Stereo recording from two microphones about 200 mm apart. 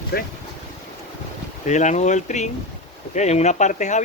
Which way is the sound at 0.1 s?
50° left (ahead or behind).